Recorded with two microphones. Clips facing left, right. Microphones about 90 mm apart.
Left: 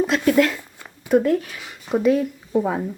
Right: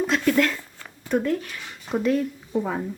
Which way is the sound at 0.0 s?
5° left (ahead or behind).